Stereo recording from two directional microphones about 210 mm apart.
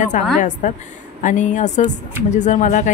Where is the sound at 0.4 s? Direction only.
35° left (ahead or behind).